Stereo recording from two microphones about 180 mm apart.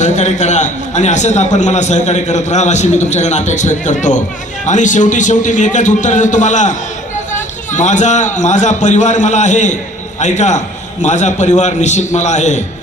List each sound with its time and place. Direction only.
0.0 s a man's voice: 40° left (ahead or behind)